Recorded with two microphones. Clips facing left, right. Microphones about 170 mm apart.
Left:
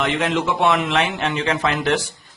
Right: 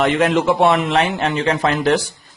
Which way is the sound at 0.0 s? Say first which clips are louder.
Right 5 dB; 45° right (ahead or behind).